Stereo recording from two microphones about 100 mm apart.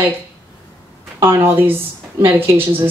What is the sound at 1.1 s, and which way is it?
Speech, 25° right (ahead or behind).